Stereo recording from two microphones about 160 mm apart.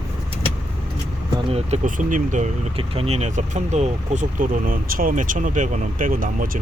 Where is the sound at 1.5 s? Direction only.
40° right (ahead or behind).